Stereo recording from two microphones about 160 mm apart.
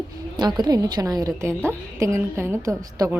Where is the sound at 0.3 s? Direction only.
25° right (ahead or behind).